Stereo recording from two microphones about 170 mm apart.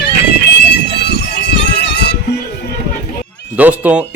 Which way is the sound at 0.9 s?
80° left.